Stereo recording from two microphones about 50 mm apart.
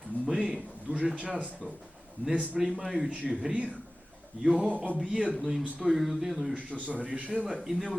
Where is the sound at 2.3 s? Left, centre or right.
Right.